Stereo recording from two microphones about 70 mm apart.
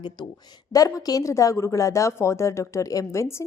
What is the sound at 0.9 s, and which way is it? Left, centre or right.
A woman's voice, left.